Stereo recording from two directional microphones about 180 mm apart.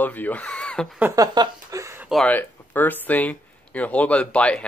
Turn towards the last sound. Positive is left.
turn(degrees=5)  # may be behind; listen again after turning